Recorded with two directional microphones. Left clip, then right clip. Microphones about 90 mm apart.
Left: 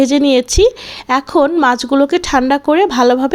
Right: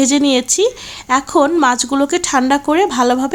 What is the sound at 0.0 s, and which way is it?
Speech, 45° left (ahead or behind).